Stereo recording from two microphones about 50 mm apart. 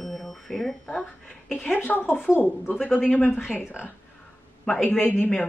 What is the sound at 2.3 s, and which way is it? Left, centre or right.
Speech, left.